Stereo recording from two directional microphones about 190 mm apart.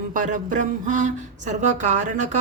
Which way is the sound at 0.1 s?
40° right (ahead or behind).